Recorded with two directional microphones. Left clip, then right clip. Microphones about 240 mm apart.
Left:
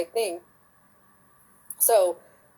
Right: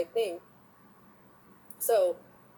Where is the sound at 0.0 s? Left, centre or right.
Left.